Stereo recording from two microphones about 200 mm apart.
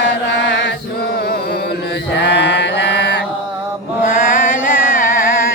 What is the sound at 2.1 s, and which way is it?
Mantra, 60° left (ahead or behind).